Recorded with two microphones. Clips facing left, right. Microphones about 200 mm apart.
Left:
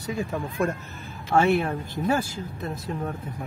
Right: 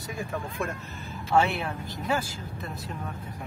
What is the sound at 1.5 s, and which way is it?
Speech, 50° left (ahead or behind).